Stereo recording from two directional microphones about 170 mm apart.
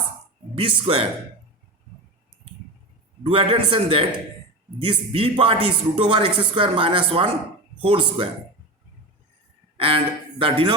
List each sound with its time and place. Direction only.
0.5 s speech: 30° right (ahead or behind)
3.2 s speech: 30° right (ahead or behind)
9.7 s speech: 35° right (ahead or behind)